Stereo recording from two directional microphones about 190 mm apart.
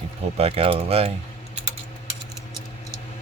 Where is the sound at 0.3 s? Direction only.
30° right (ahead or behind).